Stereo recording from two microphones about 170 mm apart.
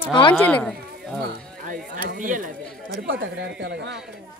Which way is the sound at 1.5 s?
55° right (ahead or behind).